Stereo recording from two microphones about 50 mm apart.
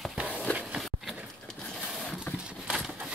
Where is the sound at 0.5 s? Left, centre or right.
Left.